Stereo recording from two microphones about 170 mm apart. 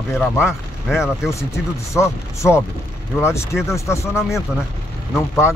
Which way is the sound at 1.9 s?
15° left (ahead or behind).